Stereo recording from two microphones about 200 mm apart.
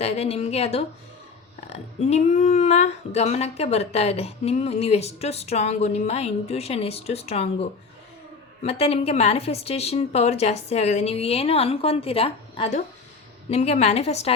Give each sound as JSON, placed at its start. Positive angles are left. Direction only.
{"t": 0.0, "sound": "speech", "side_deg": 30}